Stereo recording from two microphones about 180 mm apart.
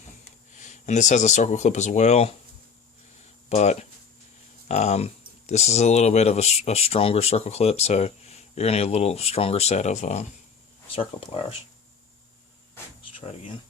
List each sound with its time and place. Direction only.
0.6 s speech: 40° left (ahead or behind)
3.5 s speech: 40° left (ahead or behind)